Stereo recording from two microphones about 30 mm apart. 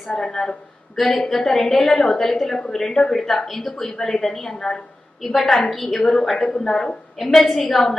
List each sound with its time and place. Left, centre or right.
0.1 s speech: centre
0.9 s a woman's voice: centre
5.2 s a woman's voice: centre
6.0 s a woman's voice: centre
7.2 s a woman's voice: centre